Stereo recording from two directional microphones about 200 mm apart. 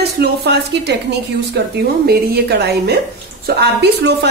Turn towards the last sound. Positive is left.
turn(degrees=-55)  # may be behind; listen again after turning